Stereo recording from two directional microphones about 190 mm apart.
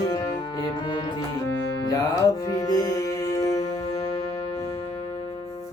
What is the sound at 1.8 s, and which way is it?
Music, 20° left (ahead or behind).